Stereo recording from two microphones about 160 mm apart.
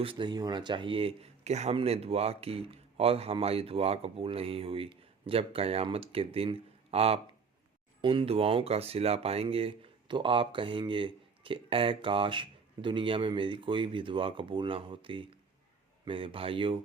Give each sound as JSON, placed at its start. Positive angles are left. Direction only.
{"t": 0.0, "sound": "speech", "side_deg": -30}